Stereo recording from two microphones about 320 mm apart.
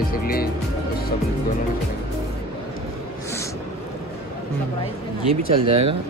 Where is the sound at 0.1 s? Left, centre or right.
Left.